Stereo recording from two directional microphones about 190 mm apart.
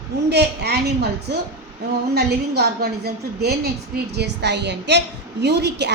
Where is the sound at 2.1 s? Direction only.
55° right (ahead or behind).